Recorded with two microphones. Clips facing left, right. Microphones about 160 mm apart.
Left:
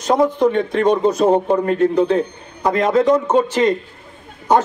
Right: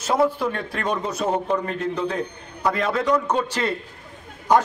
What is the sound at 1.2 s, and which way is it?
Speech, 30° left (ahead or behind).